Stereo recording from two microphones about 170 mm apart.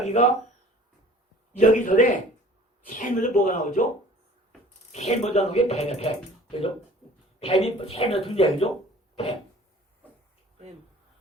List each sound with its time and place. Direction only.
0.0 s speech: 40° left (ahead or behind)
1.5 s speech: 50° left (ahead or behind)
4.9 s speech: 40° left (ahead or behind)